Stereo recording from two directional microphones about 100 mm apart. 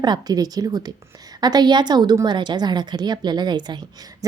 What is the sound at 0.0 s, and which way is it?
A woman's voice, 45° right (ahead or behind).